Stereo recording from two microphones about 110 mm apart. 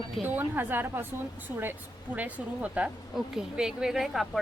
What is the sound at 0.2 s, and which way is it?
Speech, 15° right (ahead or behind).